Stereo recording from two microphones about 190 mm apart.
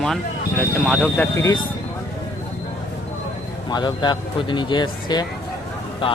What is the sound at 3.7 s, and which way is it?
Speech, 25° left (ahead or behind).